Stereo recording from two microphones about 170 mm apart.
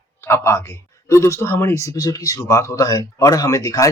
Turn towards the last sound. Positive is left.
turn(degrees=20)  # may be behind; listen again after turning